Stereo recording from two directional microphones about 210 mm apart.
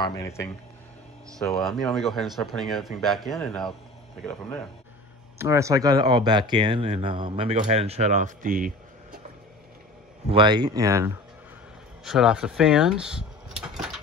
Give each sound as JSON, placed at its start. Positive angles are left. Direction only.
{"t": 0.0, "sound": "speech", "side_deg": 15}
{"t": 1.6, "sound": "speech", "side_deg": 0}
{"t": 5.4, "sound": "speech", "side_deg": -15}
{"t": 10.3, "sound": "speech", "side_deg": -20}
{"t": 12.0, "sound": "speech", "side_deg": 0}